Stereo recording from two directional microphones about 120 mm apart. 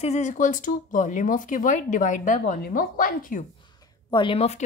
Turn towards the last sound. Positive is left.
turn(degrees=45)  # may be behind; listen again after turning